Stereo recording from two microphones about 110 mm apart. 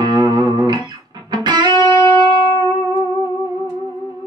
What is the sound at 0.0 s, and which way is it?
Music, 40° right (ahead or behind).